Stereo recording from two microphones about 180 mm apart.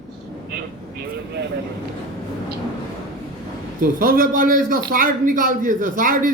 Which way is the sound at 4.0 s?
50° right (ahead or behind).